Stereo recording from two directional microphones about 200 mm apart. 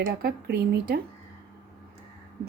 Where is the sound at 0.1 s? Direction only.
50° right (ahead or behind).